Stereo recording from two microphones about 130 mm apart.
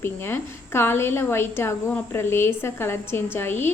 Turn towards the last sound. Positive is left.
turn(degrees=15)  # may be behind; listen again after turning